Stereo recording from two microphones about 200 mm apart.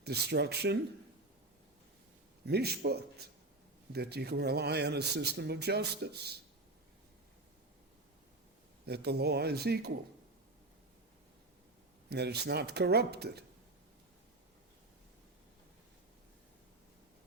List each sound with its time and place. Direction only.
0.0 s speech: 55° right (ahead or behind)
2.5 s speech: 55° right (ahead or behind)
8.9 s speech: 55° right (ahead or behind)
12.0 s speech: 55° right (ahead or behind)